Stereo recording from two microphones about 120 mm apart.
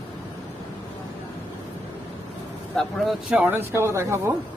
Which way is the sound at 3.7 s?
20° right (ahead or behind).